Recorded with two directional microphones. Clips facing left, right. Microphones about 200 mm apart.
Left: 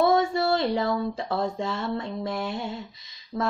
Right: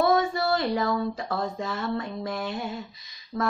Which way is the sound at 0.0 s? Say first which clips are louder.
Left 1 dB; 25° left (ahead or behind).